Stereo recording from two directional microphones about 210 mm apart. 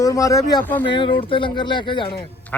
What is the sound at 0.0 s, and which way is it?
Speech, 15° left (ahead or behind).